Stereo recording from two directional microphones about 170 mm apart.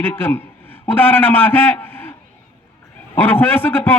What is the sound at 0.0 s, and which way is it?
A man's voice, 10° left (ahead or behind).